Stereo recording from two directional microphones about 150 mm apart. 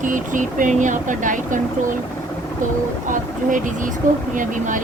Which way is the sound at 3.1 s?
60° right (ahead or behind).